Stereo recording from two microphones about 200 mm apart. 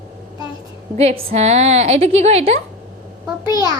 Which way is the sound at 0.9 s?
30° right (ahead or behind).